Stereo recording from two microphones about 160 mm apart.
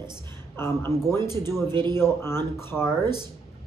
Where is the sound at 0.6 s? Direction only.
15° left (ahead or behind).